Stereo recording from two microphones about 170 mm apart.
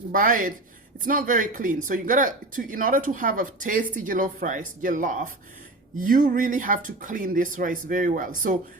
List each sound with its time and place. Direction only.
0.1 s speech: 50° right (ahead or behind)